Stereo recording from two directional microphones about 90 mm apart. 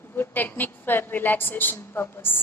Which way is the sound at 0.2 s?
20° left (ahead or behind).